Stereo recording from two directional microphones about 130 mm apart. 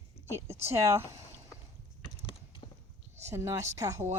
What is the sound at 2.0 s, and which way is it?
Mechanisms, 40° left (ahead or behind).